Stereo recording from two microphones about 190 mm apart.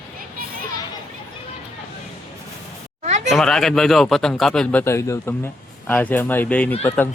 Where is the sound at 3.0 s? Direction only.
40° right (ahead or behind).